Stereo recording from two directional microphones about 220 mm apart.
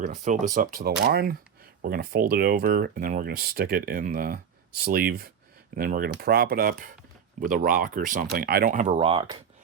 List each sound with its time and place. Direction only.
0.0 s speech: 35° right (ahead or behind)